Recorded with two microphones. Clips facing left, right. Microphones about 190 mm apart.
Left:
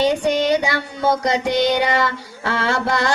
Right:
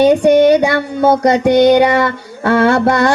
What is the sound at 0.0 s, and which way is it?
Child singing, 60° right (ahead or behind).